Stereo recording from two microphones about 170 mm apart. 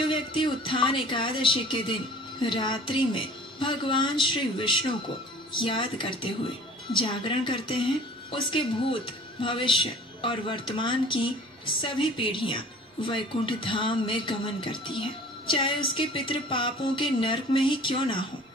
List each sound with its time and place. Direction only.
0.0 s a woman's voice: 30° left (ahead or behind)